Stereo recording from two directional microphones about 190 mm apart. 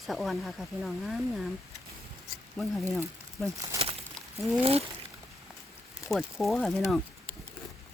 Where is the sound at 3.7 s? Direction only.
15° right (ahead or behind).